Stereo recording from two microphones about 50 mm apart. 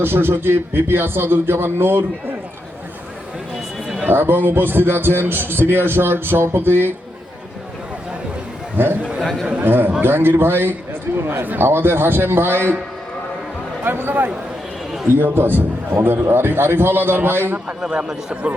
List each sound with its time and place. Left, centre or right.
0.0 s a man's voice: right
4.0 s a man's voice: right
8.8 s a man's voice: right
13.8 s a man's voice: right
17.7 s speech: centre